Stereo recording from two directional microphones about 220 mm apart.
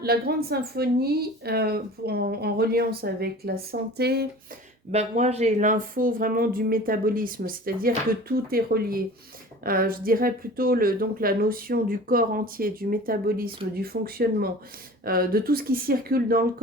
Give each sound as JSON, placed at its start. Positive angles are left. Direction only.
{"t": 0.0, "sound": "a woman's voice", "side_deg": -45}
{"t": 4.9, "sound": "a woman's voice", "side_deg": -30}